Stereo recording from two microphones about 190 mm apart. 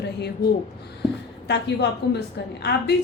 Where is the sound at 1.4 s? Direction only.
65° left (ahead or behind).